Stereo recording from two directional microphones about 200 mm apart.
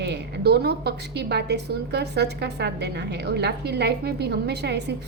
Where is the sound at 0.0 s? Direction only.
55° right (ahead or behind).